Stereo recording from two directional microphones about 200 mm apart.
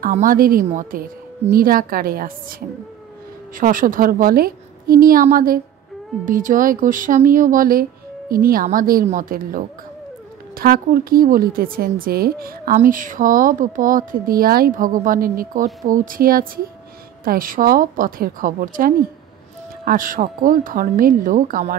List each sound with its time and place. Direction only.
0.0 s a woman's voice: 45° right (ahead or behind)
3.5 s a woman's voice: 45° right (ahead or behind)